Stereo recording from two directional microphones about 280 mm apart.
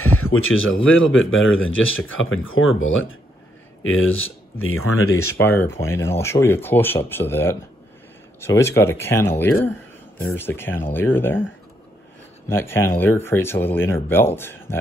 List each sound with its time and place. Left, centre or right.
0.0 s speech: left
5.3 s speech: centre
12.4 s speech: centre